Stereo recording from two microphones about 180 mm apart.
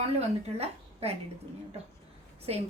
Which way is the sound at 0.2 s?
35° right (ahead or behind).